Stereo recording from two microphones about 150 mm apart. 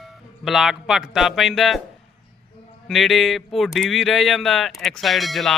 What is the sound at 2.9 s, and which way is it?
Speech, centre (ahead or behind).